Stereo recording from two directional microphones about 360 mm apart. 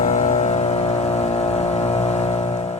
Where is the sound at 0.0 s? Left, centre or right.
Centre.